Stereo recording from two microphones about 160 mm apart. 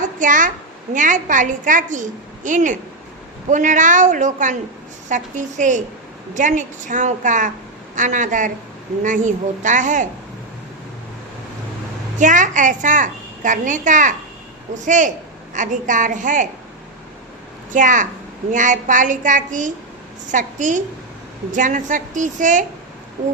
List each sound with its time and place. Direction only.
0.2 s a woman's voice: 55° right (ahead or behind)
12.2 s a child's voice: 50° right (ahead or behind)
17.7 s a child's voice: 55° right (ahead or behind)